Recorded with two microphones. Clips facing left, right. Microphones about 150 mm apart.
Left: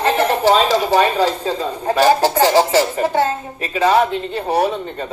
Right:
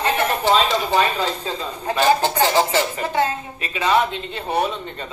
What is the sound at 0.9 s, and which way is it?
Speech, 40° left (ahead or behind).